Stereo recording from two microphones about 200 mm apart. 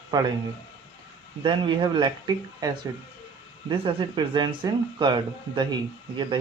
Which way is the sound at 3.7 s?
25° right (ahead or behind).